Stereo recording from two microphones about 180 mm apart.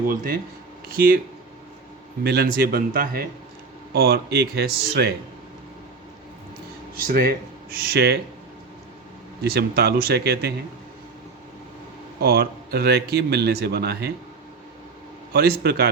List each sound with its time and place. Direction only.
0.9 s a man's voice: 55° right (ahead or behind)
2.2 s a man's voice: 60° right (ahead or behind)
7.0 s a man's voice: 55° right (ahead or behind)
9.4 s a man's voice: 65° right (ahead or behind)
12.2 s a man's voice: 60° right (ahead or behind)
15.3 s a man's voice: 60° right (ahead or behind)